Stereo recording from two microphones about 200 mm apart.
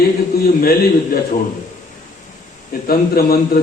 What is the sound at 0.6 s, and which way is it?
Speech, 45° left (ahead or behind).